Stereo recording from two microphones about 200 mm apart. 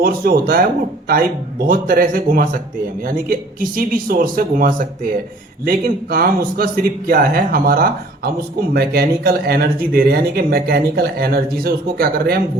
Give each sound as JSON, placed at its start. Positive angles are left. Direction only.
{"t": 0.0, "sound": "speech", "side_deg": -50}